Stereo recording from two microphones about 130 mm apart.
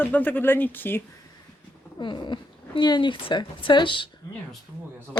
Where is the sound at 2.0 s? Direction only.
35° left (ahead or behind).